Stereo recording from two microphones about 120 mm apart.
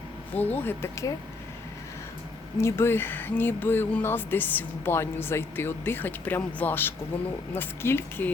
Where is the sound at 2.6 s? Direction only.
20° left (ahead or behind).